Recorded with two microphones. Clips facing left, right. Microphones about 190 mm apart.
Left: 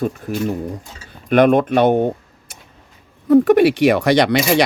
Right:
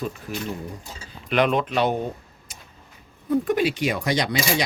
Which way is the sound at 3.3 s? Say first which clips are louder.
Left 10 dB; 65° left (ahead or behind).